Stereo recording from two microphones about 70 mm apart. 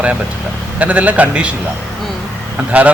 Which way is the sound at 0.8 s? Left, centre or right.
Right.